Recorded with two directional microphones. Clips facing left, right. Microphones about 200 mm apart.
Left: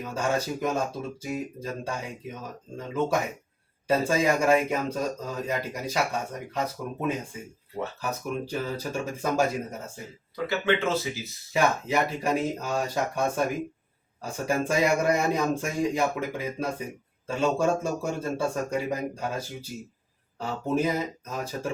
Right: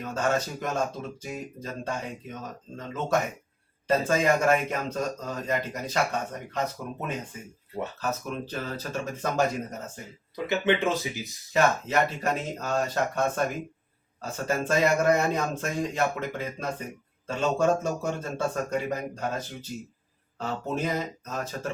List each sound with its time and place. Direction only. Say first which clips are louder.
0.0 s a man's voice: right 1 dB; 10° left (ahead or behind)
8.0 s a man's voice: left 1 dB; 10° left (ahead or behind)
10.3 s speech: right 1 dB; 20° right (ahead or behind)
11.5 s a man's voice: right 1 dB; 10° left (ahead or behind)